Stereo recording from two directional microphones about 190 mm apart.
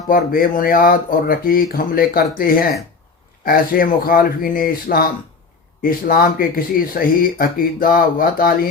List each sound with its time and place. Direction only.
0.1 s speech: 50° left (ahead or behind)
3.4 s speech: 50° left (ahead or behind)